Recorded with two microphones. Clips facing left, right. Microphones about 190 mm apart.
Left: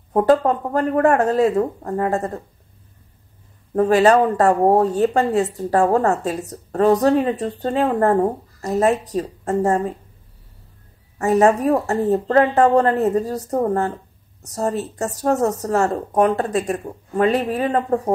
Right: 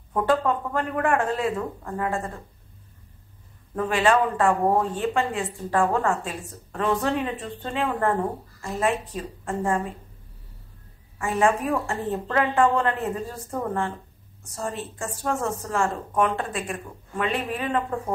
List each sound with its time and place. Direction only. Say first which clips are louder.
0.1 s speech: left 7 dB; 40° left (ahead or behind)
3.7 s speech: left 8 dB; 40° left (ahead or behind)
11.1 s speech: left 7 dB; 40° left (ahead or behind)